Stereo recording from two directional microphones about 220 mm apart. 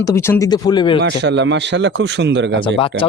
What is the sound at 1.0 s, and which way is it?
A man's voice, 50° right (ahead or behind).